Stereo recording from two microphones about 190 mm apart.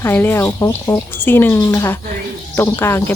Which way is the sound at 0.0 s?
10° left (ahead or behind).